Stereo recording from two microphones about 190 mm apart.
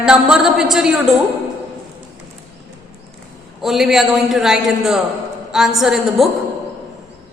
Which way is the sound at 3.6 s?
Centre (ahead or behind).